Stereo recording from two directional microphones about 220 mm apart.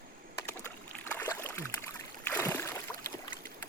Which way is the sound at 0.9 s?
10° left (ahead or behind).